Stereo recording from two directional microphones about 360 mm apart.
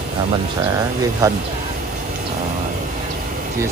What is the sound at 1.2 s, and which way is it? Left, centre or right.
Speech, centre.